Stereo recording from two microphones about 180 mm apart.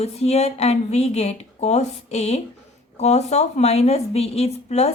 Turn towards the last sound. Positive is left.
turn(degrees=35)  # may be behind; listen again after turning